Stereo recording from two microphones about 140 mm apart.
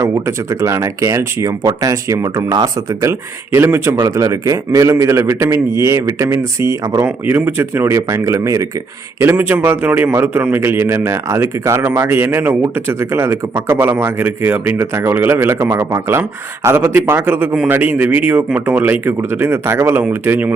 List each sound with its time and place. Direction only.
0.0 s a man's voice: 20° right (ahead or behind)